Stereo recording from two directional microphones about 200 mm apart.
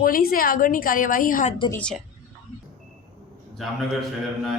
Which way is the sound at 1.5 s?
25° left (ahead or behind).